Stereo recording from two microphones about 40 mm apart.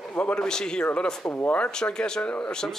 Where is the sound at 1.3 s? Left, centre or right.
Left.